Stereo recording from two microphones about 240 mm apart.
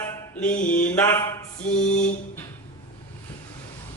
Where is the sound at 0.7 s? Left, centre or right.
Centre.